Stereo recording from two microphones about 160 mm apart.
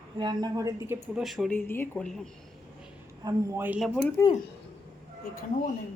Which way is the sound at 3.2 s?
20° right (ahead or behind).